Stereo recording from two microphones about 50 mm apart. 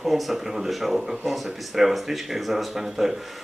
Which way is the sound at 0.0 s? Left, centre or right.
Centre.